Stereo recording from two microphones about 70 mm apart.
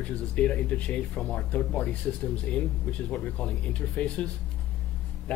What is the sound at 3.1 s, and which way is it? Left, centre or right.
Speech, centre.